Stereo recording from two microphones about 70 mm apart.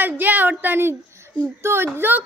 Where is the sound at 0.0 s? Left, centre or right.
Right.